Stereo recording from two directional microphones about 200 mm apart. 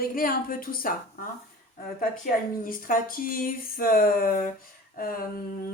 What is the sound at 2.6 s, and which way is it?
Speech, 45° left (ahead or behind).